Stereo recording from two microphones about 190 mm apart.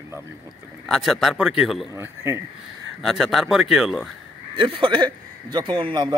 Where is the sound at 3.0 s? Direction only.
Centre (ahead or behind).